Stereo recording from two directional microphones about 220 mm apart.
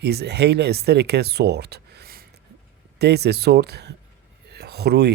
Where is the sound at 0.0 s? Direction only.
50° right (ahead or behind).